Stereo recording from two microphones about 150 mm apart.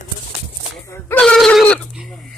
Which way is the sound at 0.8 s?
20° left (ahead or behind).